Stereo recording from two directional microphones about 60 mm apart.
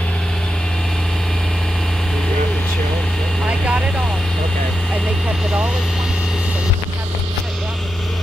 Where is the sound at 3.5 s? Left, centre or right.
Centre.